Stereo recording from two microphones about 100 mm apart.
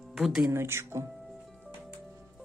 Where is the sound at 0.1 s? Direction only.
5° right (ahead or behind).